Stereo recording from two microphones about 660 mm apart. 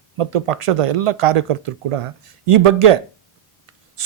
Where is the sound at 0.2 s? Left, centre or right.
Right.